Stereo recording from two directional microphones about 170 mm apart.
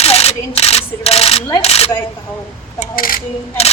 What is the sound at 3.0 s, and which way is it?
Speech, 55° left (ahead or behind).